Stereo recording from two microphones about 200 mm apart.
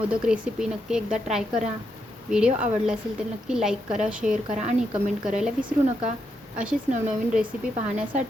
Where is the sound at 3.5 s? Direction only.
5° right (ahead or behind).